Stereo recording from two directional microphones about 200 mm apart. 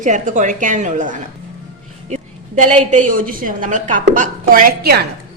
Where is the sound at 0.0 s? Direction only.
40° right (ahead or behind).